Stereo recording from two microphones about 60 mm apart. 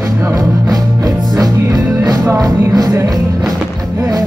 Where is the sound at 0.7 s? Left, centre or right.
Right.